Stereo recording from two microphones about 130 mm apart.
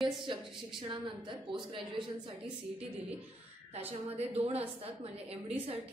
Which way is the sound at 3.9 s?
50° right (ahead or behind).